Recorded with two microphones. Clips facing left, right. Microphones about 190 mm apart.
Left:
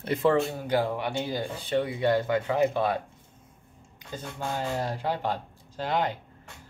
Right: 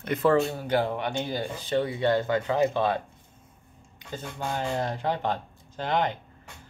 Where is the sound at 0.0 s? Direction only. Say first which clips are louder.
Right 1 dB; 25° left (ahead or behind).